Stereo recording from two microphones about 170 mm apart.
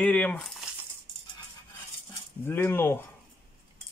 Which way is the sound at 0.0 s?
10° left (ahead or behind).